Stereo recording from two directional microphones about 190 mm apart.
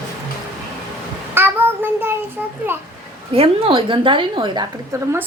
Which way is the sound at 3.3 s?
30° right (ahead or behind).